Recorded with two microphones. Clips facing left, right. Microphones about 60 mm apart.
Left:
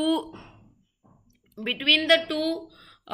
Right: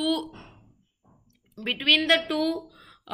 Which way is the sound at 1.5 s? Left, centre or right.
Centre.